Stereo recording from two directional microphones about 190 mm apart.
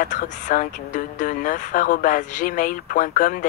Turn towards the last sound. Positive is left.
turn(degrees=45)  # may be behind; listen again after turning